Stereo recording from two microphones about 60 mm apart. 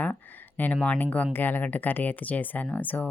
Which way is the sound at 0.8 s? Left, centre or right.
Left.